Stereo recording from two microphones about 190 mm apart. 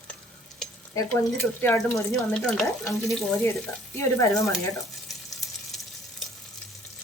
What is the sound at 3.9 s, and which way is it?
Speech, 15° left (ahead or behind).